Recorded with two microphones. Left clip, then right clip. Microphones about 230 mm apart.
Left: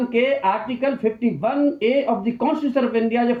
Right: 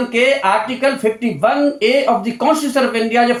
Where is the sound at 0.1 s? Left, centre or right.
Right.